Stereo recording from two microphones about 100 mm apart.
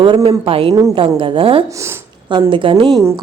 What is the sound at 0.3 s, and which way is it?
A woman's voice, 65° right (ahead or behind).